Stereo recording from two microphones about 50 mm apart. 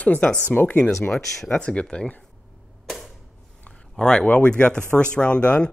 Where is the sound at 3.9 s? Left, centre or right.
Centre.